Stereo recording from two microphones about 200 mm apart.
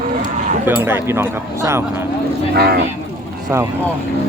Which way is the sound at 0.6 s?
10° right (ahead or behind).